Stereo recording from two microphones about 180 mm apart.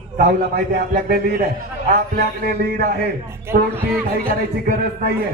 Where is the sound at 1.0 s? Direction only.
55° right (ahead or behind).